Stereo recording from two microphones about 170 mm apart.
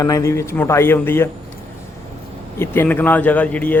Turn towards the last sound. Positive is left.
turn(degrees=10)  # may be behind; listen again after turning